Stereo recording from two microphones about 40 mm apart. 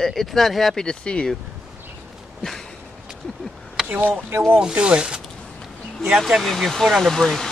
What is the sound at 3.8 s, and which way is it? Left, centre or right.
Speech, right.